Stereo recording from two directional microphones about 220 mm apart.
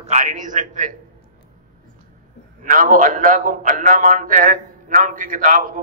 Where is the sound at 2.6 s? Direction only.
35° right (ahead or behind).